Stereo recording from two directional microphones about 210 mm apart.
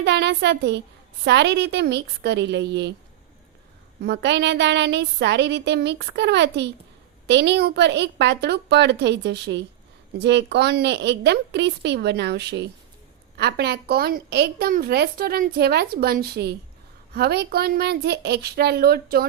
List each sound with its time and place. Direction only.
0.0 s a woman's voice: 55° right (ahead or behind)
4.0 s a woman's voice: 55° right (ahead or behind)